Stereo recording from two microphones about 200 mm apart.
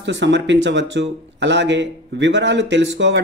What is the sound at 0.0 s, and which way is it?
Speech, 65° right (ahead or behind).